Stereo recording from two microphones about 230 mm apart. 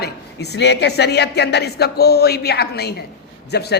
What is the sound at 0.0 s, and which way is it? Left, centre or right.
Speech, left.